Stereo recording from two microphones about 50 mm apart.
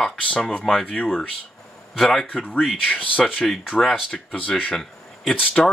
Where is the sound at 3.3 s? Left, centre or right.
Centre.